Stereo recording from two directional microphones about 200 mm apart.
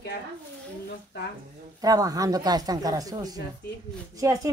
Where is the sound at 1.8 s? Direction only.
20° right (ahead or behind).